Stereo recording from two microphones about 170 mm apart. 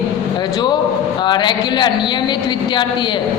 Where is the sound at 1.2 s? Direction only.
25° left (ahead or behind).